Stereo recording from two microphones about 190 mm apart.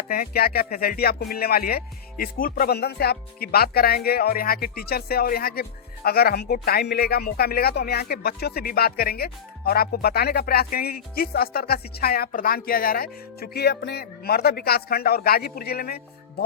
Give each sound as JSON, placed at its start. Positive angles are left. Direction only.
{"t": 0.1, "sound": "music", "side_deg": 55}